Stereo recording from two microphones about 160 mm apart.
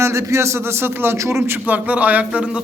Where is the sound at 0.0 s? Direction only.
20° right (ahead or behind).